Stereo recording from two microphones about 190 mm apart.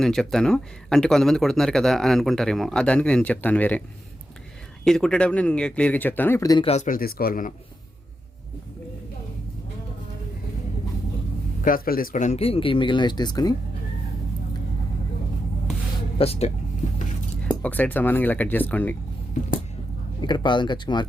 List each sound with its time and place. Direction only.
0.0 s speech: centre (ahead or behind)
4.9 s speech: 5° left (ahead or behind); by 6.7 s 20° left (ahead or behind)
6.7 s a man's voice: 40° left (ahead or behind)
11.6 s speech: 45° left (ahead or behind); by 13.6 s 20° left (ahead or behind)
16.1 s speech: 30° left (ahead or behind)
17.5 s speech: 10° left (ahead or behind)
20.2 s speech: 25° left (ahead or behind)